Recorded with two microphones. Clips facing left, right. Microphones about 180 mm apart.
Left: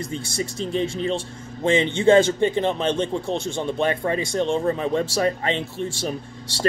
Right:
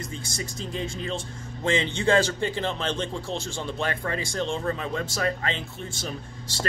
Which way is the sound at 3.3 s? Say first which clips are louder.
Left 6 dB; 60° left (ahead or behind).